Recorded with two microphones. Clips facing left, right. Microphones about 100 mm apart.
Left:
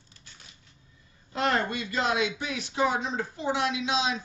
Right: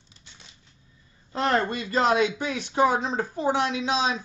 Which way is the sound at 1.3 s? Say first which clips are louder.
Right 3 dB; 35° right (ahead or behind).